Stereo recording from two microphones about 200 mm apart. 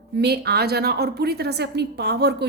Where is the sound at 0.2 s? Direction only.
55° right (ahead or behind).